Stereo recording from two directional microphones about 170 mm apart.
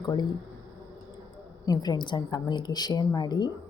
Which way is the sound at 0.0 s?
25° left (ahead or behind).